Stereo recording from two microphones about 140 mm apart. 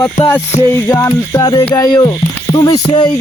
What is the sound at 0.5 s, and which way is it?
Speech, 55° left (ahead or behind).